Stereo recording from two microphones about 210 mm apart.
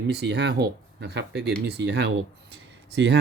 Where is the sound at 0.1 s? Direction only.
55° right (ahead or behind).